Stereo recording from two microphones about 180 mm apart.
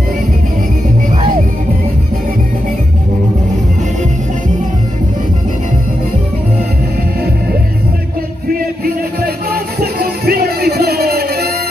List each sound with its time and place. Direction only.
9.5 s music: 55° right (ahead or behind)